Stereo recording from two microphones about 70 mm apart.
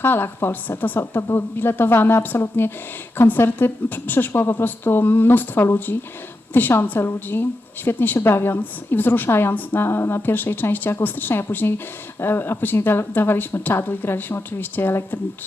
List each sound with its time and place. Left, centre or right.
0.0 s a woman's voice: left